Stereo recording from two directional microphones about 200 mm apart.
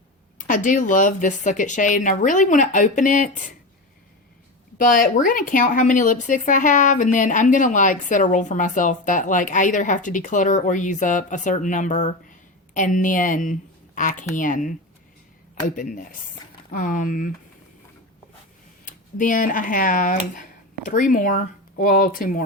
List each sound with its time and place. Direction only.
0.4 s a woman's voice: 40° left (ahead or behind)
4.8 s a woman's voice: 45° left (ahead or behind)
18.9 s a woman's voice: 40° left (ahead or behind)